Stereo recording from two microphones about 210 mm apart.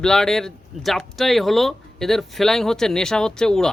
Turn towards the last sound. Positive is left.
turn(degrees=5)  # may be behind; listen again after turning